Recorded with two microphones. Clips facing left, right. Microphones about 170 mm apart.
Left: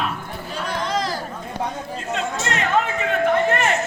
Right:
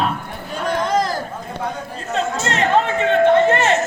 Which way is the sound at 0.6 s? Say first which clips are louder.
Right 6 dB; 50° right (ahead or behind).